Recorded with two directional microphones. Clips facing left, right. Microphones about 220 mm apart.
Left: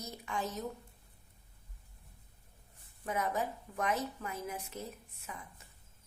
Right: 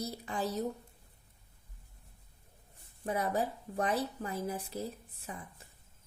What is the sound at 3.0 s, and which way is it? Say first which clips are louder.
A woman's voice: right 2 dB; 35° right (ahead or behind).